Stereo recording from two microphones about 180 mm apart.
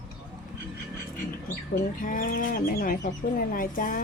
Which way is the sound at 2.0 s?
50° left (ahead or behind).